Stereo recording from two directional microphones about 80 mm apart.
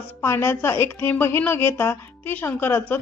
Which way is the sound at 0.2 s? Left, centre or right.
Left.